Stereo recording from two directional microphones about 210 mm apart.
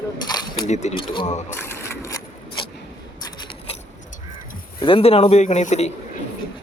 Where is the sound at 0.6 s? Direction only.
35° left (ahead or behind).